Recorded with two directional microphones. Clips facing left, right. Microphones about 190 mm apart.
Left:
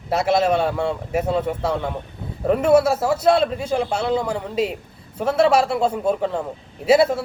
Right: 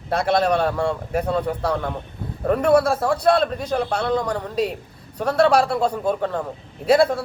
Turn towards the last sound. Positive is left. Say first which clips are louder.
# left 1 dB
turn(degrees=5)  # may be behind; listen again after turning